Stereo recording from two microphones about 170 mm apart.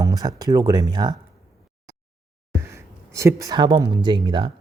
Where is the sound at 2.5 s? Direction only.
15° right (ahead or behind).